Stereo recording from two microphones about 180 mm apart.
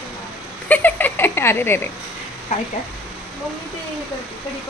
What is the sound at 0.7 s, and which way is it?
Speech, 10° left (ahead or behind).